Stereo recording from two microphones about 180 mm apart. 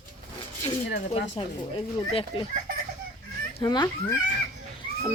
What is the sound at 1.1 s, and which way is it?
Speech, 30° left (ahead or behind).